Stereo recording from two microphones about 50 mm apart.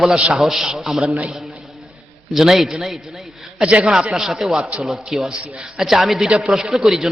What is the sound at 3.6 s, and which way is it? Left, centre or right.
Speech, right.